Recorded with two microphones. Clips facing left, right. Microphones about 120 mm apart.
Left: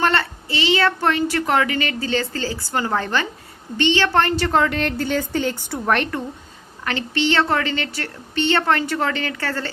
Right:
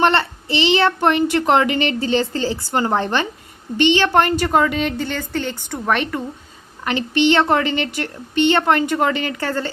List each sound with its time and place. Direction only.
0.0 s a child's voice: 25° right (ahead or behind); by 6.2 s centre (ahead or behind)
6.8 s a woman's voice: 20° right (ahead or behind)